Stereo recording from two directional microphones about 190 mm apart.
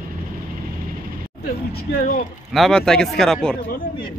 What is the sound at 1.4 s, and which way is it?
Speech, 55° left (ahead or behind).